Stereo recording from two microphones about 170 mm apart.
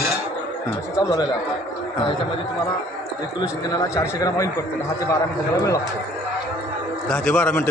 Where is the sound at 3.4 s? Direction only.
25° left (ahead or behind).